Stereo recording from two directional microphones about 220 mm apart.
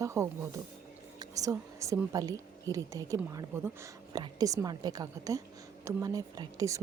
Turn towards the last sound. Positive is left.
turn(degrees=-15)  # may be behind; listen again after turning